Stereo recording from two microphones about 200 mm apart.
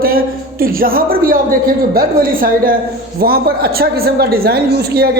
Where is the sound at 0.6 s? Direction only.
45° right (ahead or behind).